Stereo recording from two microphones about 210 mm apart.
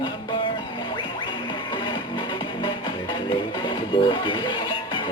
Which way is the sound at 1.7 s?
20° left (ahead or behind).